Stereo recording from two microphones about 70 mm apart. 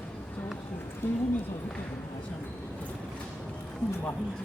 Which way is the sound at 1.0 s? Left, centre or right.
Left.